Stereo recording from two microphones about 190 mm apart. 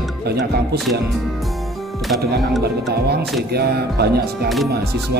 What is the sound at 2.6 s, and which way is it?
Speech, 60° right (ahead or behind).